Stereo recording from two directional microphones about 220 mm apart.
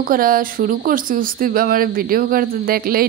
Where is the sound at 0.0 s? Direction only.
40° right (ahead or behind).